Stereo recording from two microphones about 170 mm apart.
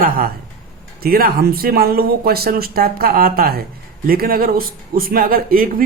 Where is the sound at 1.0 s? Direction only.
60° right (ahead or behind).